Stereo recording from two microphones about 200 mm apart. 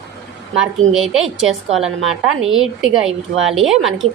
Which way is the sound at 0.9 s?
Centre (ahead or behind).